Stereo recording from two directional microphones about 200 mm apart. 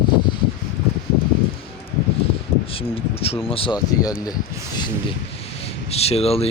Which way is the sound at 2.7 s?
30° left (ahead or behind).